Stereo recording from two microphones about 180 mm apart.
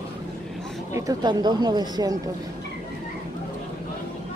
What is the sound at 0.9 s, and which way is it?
Speech, 15° right (ahead or behind).